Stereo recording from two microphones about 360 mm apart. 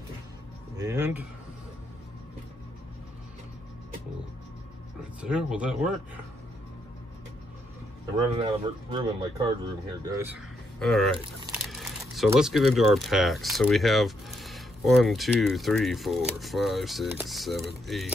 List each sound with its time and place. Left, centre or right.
0.7 s speech: centre
5.2 s speech: centre
8.4 s speech: centre